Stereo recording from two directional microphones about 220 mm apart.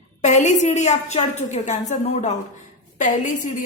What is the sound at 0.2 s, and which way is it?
A woman's voice, 35° left (ahead or behind).